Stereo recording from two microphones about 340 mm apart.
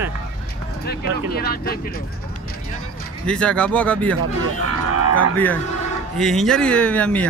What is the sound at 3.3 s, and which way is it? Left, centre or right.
Speech, centre.